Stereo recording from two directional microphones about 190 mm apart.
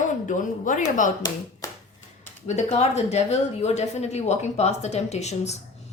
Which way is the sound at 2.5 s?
35° left (ahead or behind).